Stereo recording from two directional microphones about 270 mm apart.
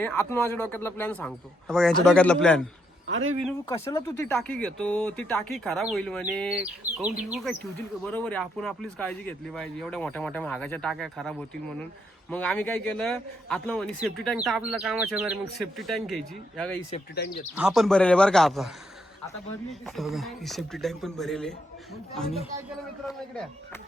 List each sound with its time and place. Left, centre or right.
0.0 s speech: centre
3.1 s speech: right
3.7 s speech: centre
19.8 s speech: centre